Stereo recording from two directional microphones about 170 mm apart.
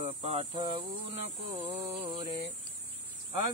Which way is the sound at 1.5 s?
35° right (ahead or behind).